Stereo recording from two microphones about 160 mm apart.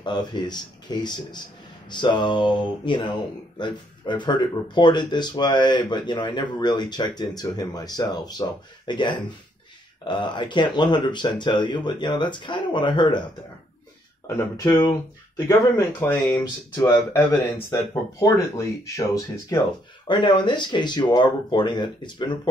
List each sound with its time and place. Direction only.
0.0 s speech: 25° left (ahead or behind)
14.2 s speech: 15° left (ahead or behind)